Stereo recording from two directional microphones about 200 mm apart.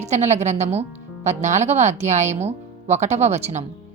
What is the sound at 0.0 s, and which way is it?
Speech, 35° right (ahead or behind).